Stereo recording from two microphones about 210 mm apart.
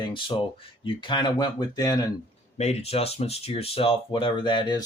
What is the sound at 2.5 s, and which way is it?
Speech, 30° left (ahead or behind).